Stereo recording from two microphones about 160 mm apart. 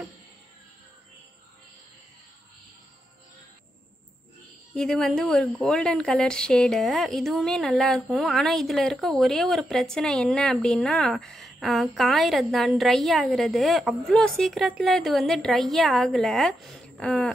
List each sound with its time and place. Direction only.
4.7 s a woman's voice: 5° left (ahead or behind)